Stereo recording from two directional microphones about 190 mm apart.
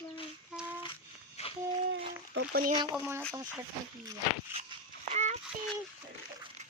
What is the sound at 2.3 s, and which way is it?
Speech, 70° right (ahead or behind).